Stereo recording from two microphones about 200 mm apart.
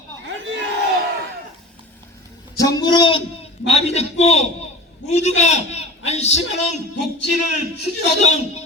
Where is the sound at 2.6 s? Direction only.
20° left (ahead or behind).